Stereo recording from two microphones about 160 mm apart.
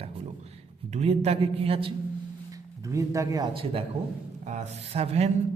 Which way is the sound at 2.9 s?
20° right (ahead or behind).